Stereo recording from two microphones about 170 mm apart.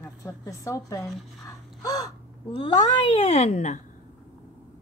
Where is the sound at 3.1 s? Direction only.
40° left (ahead or behind).